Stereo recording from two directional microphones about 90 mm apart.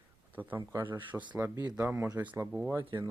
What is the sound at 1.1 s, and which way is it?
Speech, 5° right (ahead or behind).